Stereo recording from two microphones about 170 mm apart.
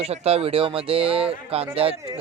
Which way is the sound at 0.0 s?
35° right (ahead or behind).